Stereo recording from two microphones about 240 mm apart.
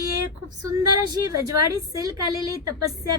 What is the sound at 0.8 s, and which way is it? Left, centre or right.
A woman's voice, centre.